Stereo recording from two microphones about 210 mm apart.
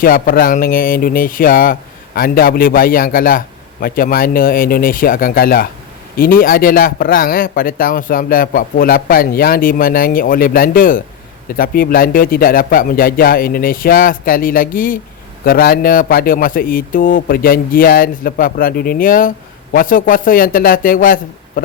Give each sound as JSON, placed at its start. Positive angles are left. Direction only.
{"t": 0.0, "sound": "a man's voice", "side_deg": 45}